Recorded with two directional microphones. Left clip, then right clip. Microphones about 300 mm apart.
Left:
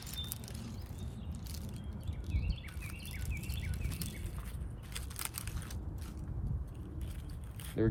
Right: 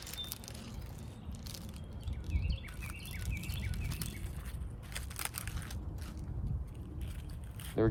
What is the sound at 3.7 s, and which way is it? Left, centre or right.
Bird, centre.